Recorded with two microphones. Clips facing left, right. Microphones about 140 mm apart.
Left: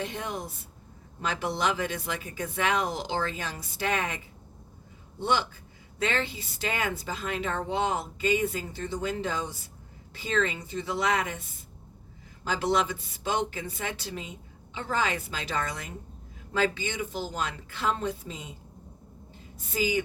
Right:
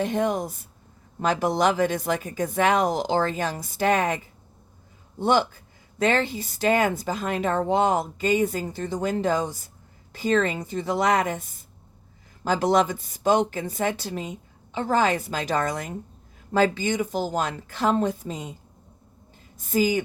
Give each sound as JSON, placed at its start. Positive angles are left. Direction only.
{"t": 0.0, "sound": "speech", "side_deg": -45}
{"t": 5.2, "sound": "speech", "side_deg": -45}
{"t": 19.5, "sound": "speech", "side_deg": -45}